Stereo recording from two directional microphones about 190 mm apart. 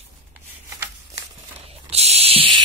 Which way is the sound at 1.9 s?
35° right (ahead or behind).